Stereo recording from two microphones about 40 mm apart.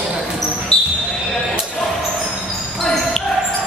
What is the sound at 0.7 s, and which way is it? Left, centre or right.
Basketball bounce, left.